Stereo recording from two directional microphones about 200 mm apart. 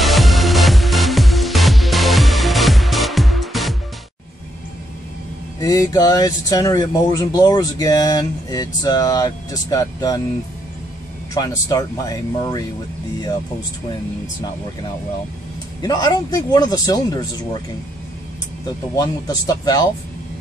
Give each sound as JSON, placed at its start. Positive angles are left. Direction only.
{"t": 0.0, "sound": "music", "side_deg": 0}
{"t": 5.6, "sound": "speech", "side_deg": 15}
{"t": 11.3, "sound": "speech", "side_deg": 20}
{"t": 15.8, "sound": "speech", "side_deg": 20}
{"t": 18.9, "sound": "speech", "side_deg": 20}